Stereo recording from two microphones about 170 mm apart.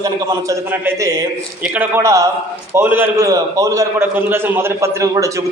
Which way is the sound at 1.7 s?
10° right (ahead or behind).